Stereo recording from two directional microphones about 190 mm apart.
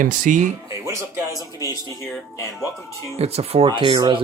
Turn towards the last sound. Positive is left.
turn(degrees=-25)  # may be behind; listen again after turning